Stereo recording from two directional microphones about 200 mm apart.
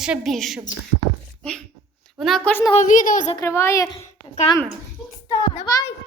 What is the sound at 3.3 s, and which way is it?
Speech, 15° left (ahead or behind).